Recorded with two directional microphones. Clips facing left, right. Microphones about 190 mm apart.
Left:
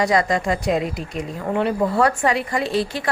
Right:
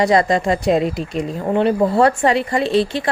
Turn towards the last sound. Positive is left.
turn(degrees=-25)  # may be behind; listen again after turning